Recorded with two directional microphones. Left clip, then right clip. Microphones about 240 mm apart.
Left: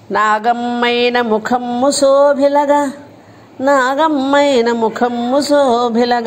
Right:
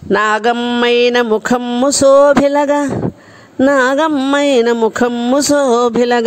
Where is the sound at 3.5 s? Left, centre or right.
Right.